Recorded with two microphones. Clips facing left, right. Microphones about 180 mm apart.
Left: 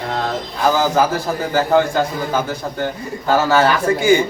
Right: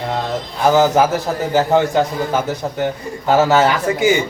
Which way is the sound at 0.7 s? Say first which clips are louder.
Right 4 dB; 20° right (ahead or behind).